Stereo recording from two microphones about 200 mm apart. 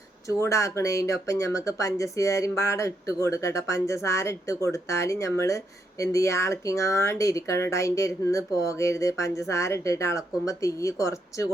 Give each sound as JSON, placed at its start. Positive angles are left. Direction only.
{"t": 0.4, "sound": "speech", "side_deg": 15}